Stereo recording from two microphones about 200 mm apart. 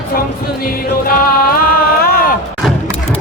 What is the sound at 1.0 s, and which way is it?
Music, 45° left (ahead or behind).